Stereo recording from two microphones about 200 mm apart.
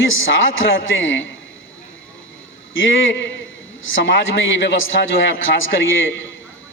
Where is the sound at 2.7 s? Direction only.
75° left (ahead or behind).